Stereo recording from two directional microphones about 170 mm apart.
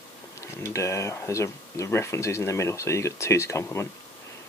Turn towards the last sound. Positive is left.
turn(degrees=15)  # may be behind; listen again after turning